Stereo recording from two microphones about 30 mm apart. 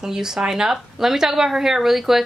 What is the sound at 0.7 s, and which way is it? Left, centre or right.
Speech, centre.